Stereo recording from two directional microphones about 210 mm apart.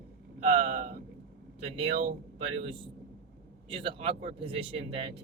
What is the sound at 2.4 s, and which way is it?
Speech, 25° right (ahead or behind).